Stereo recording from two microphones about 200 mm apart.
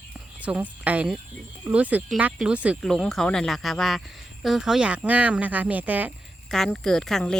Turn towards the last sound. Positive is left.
turn(degrees=0)  # may be behind; listen again after turning